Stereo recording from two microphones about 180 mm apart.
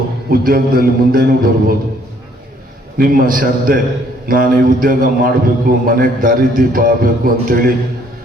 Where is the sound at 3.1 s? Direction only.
50° right (ahead or behind).